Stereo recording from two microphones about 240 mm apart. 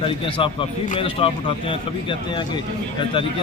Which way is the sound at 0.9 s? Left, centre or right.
Left.